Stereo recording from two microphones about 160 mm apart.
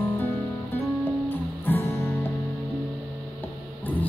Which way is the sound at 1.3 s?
15° left (ahead or behind).